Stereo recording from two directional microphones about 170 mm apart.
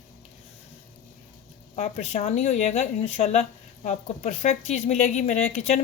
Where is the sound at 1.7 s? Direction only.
40° left (ahead or behind).